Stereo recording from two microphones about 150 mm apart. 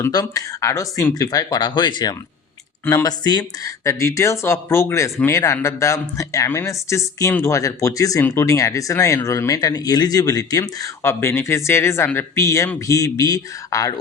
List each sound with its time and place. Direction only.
0.0 s speech: 25° left (ahead or behind)